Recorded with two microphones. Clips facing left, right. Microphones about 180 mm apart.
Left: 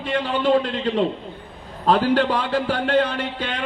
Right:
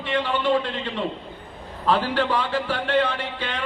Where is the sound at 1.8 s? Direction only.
40° left (ahead or behind).